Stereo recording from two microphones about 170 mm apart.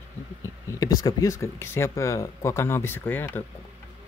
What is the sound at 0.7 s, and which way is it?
Speech, 20° left (ahead or behind).